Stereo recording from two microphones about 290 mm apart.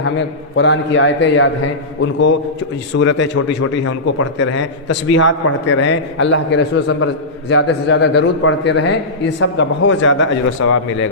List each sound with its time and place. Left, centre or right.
0.5 s a man's voice: left
2.9 s a man's voice: left
3.3 s a man's voice: left